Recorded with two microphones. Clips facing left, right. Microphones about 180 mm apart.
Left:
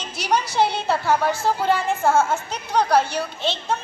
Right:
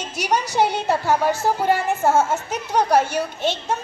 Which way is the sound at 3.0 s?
45° right (ahead or behind).